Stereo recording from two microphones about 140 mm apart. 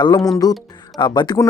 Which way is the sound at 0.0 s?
30° left (ahead or behind).